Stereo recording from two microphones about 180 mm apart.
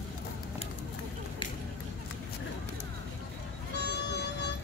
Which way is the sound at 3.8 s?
70° left (ahead or behind).